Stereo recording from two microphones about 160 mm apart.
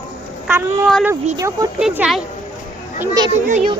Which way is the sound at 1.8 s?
5° right (ahead or behind).